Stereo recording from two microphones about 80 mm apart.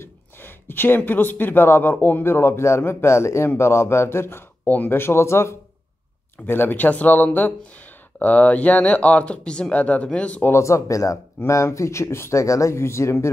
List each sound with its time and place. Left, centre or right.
0.0 s speech: left
10.5 s speech: left